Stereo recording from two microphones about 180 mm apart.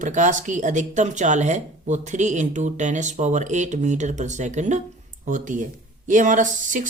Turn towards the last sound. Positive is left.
turn(degrees=-45)  # may be behind; listen again after turning